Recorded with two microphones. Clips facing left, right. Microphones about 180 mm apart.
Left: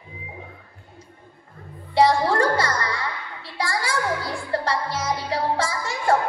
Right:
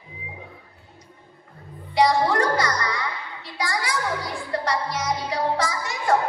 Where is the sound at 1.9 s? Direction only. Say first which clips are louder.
Left 1 dB; 30° left (ahead or behind).